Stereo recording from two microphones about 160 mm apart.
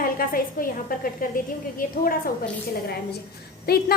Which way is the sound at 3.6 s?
75° left (ahead or behind).